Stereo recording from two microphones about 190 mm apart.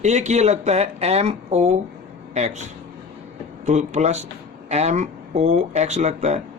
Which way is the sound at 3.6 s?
40° right (ahead or behind).